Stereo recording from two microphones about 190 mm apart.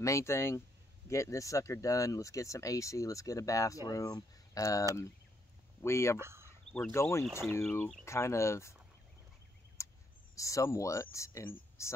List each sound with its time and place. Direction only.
0.0 s speech: 15° left (ahead or behind)
6.1 s speech: 15° right (ahead or behind)
6.7 s speech: 10° left (ahead or behind)
9.8 s a sound: 15° left (ahead or behind)
10.3 s speech: 15° left (ahead or behind)